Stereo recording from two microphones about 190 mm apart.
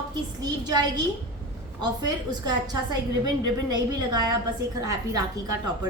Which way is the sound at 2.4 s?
20° right (ahead or behind).